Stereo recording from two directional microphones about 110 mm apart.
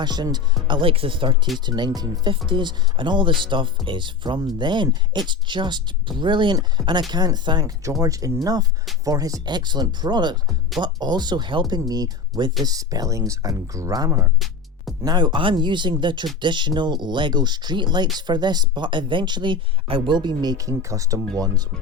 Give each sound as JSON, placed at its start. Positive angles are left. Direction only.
{"t": 0.0, "sound": "speech", "side_deg": -40}
{"t": 15.0, "sound": "speech", "side_deg": -40}